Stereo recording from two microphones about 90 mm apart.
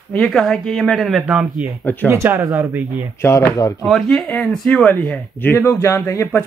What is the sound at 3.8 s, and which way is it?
Speech, centre (ahead or behind).